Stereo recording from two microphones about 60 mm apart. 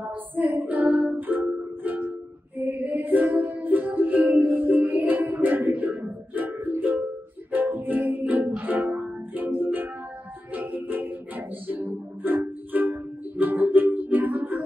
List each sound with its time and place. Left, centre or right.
0.0 s music: right